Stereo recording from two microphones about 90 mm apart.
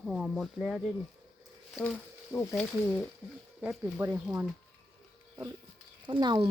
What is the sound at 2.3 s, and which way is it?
Speech, 25° left (ahead or behind).